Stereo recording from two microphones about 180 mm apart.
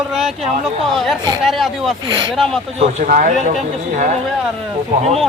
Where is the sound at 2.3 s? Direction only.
Centre (ahead or behind).